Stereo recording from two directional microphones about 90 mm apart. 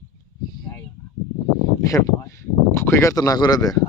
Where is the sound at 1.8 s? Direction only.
35° left (ahead or behind).